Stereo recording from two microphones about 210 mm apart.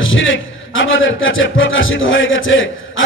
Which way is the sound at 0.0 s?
65° left (ahead or behind).